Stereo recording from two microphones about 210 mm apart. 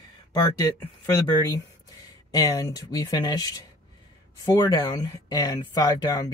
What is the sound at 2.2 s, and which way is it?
Speech, 15° left (ahead or behind).